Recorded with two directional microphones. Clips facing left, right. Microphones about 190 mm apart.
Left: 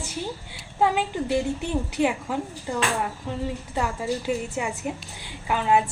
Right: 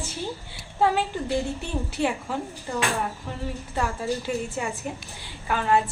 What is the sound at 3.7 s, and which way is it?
Speech, 15° left (ahead or behind).